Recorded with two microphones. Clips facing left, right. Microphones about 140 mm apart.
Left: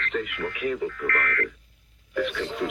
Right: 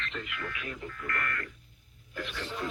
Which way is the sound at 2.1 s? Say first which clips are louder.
Left 10 dB; 85° left.